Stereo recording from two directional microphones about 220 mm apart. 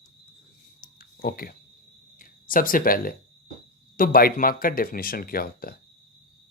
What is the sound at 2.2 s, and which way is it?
Speech, 40° left (ahead or behind).